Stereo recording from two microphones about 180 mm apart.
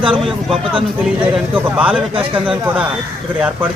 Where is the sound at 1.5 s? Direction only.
10° right (ahead or behind).